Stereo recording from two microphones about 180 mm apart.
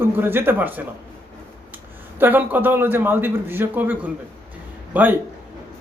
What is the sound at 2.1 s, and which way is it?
Speech, 10° right (ahead or behind).